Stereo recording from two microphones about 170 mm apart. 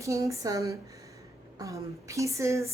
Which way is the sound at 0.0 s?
20° right (ahead or behind).